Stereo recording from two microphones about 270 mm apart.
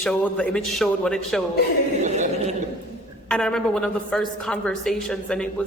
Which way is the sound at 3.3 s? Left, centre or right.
Centre.